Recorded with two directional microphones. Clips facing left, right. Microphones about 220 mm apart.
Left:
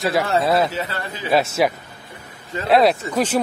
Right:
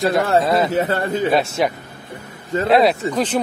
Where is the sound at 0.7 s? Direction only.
50° right (ahead or behind).